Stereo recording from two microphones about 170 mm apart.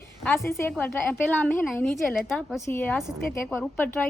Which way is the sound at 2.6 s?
15° left (ahead or behind).